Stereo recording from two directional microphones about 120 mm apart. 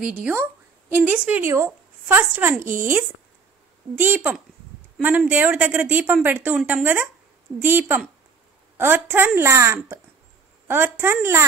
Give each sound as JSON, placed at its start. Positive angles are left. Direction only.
{"t": 0.0, "sound": "a woman's voice", "side_deg": -15}